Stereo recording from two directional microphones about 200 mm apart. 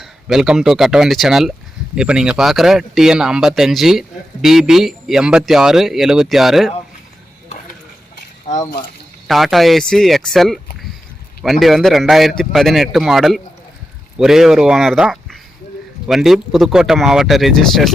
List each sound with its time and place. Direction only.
0.0 s speech: centre (ahead or behind)
8.5 s speech: 35° left (ahead or behind)
9.2 s speech: centre (ahead or behind)
11.6 s speech: centre (ahead or behind)